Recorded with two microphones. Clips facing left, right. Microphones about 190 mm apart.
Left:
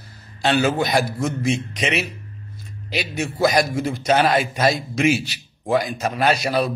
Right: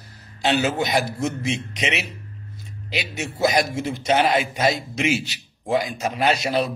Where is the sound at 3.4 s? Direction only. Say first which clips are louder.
Left 2 dB; 25° right (ahead or behind).